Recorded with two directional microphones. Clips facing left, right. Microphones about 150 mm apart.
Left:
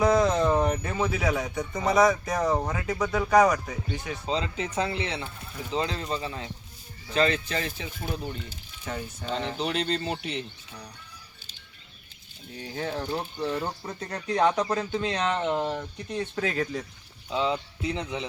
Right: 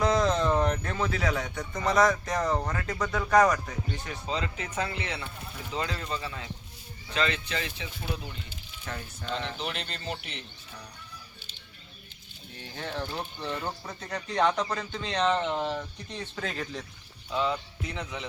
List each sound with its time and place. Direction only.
0.0 s speech: 5° left (ahead or behind)
4.3 s speech: 30° left (ahead or behind)
8.9 s speech: 15° left (ahead or behind)
9.2 s speech: 35° left (ahead or behind)
12.7 s speech: 10° left (ahead or behind)
17.2 s speech: 25° left (ahead or behind)